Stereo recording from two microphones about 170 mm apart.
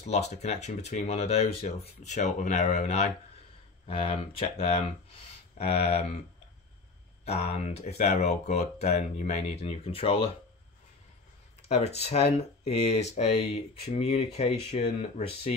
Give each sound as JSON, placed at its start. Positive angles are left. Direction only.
{"t": 0.0, "sound": "speech", "side_deg": 40}
{"t": 7.2, "sound": "speech", "side_deg": 40}
{"t": 11.6, "sound": "speech", "side_deg": 40}